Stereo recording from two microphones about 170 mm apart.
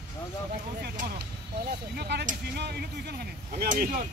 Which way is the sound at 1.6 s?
75° right (ahead or behind).